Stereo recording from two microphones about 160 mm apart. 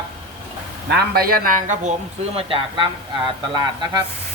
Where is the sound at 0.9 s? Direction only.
80° right; by 1.9 s 55° right (ahead or behind).